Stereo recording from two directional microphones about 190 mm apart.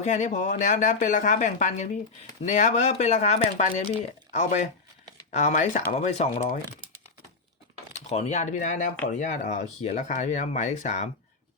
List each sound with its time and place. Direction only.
0.0 s speech: 40° left (ahead or behind)
8.1 s speech: 35° left (ahead or behind)